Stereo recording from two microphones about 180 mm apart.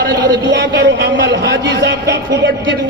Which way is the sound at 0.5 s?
80° right.